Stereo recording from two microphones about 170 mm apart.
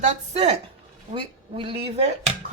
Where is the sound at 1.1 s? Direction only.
30° right (ahead or behind).